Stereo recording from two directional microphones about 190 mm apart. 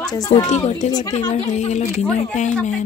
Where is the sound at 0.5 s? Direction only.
35° left (ahead or behind).